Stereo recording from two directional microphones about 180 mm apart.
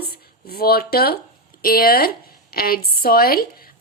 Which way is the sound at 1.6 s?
55° left (ahead or behind).